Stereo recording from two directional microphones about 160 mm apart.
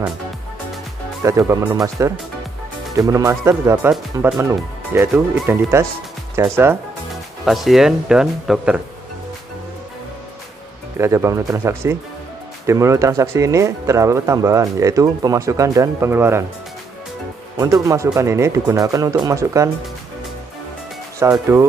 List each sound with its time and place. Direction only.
1.2 s speech: 20° right (ahead or behind)
7.4 s speech: centre (ahead or behind)
11.0 s speech: 15° right (ahead or behind)
17.6 s speech: 20° right (ahead or behind)
21.2 s speech: 20° right (ahead or behind)